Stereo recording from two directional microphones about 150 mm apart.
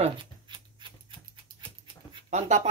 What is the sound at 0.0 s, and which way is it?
Scissors, 35° right (ahead or behind).